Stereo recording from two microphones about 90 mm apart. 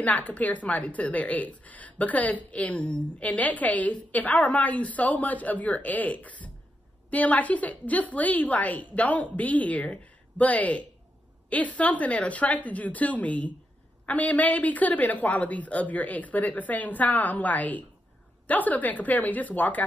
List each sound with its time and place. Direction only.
0.0 s a woman's voice: 15° left (ahead or behind)